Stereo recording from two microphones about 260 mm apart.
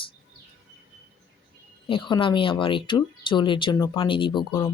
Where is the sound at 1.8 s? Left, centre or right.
Centre.